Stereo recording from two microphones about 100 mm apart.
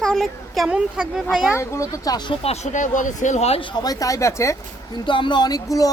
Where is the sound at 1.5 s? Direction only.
30° left (ahead or behind).